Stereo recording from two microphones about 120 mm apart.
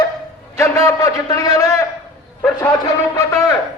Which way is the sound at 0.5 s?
25° left (ahead or behind).